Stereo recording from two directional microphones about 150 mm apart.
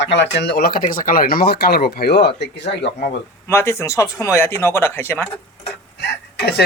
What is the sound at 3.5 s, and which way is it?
Speech, 15° left (ahead or behind).